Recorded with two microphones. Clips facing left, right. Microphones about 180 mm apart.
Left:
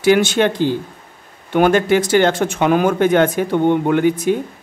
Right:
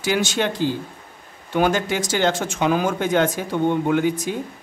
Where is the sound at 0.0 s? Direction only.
60° left (ahead or behind).